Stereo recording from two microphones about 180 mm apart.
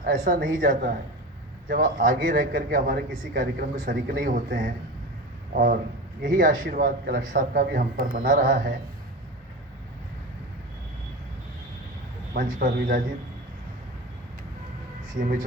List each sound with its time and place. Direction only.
0.0 s a man's voice: 55° right (ahead or behind)
6.2 s a man's voice: 50° right (ahead or behind)
12.3 s a man's voice: 55° right (ahead or behind)
15.1 s a man's voice: 45° right (ahead or behind)